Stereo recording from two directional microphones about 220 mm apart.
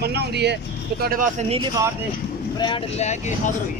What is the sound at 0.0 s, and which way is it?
Speech, 45° right (ahead or behind).